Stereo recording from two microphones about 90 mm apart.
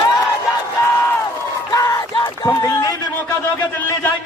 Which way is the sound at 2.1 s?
55° left (ahead or behind).